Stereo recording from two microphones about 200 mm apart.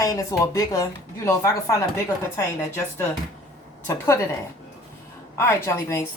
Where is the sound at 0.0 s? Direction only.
15° left (ahead or behind).